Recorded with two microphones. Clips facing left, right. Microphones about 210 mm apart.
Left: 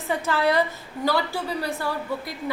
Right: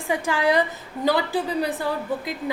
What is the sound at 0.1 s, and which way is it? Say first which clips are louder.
A woman's voice: right 1 dB; 15° right (ahead or behind).